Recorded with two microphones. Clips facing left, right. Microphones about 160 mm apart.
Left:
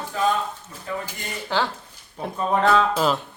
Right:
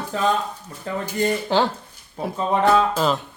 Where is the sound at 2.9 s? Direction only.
Centre (ahead or behind).